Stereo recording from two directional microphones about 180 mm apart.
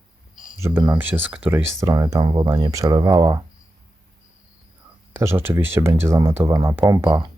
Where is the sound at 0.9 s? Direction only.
10° right (ahead or behind).